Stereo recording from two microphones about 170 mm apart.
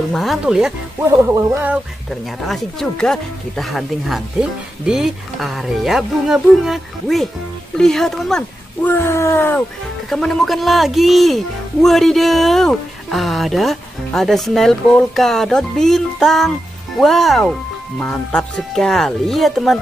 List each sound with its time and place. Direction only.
0.1 s speech: centre (ahead or behind)
1.0 s music: 15° right (ahead or behind)
2.0 s a woman's voice: centre (ahead or behind)
8.9 s speech: 15° left (ahead or behind)
10.0 s speech: centre (ahead or behind)